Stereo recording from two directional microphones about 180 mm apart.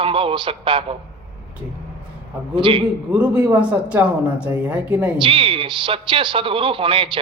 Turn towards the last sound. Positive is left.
turn(degrees=-30)  # may be behind; listen again after turning